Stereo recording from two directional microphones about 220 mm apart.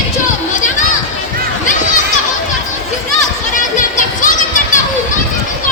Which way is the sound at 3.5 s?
35° left (ahead or behind).